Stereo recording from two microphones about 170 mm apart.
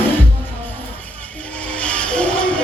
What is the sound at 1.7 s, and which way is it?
Music, 5° left (ahead or behind).